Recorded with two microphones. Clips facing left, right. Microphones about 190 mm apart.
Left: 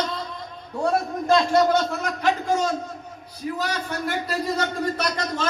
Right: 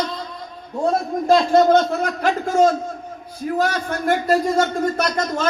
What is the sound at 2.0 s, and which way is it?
A man's voice, 50° right (ahead or behind).